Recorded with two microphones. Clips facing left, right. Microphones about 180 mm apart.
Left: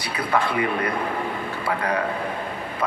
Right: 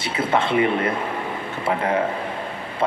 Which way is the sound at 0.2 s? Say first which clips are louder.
Right 4 dB; 25° right (ahead or behind).